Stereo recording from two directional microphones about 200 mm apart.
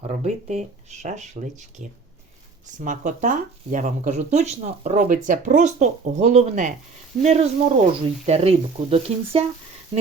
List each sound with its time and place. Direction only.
0.1 s speech: 35° right (ahead or behind)
2.6 s speech: 40° right (ahead or behind)